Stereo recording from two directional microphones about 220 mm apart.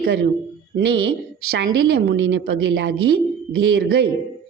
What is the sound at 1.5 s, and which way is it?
A woman's voice, 50° right (ahead or behind).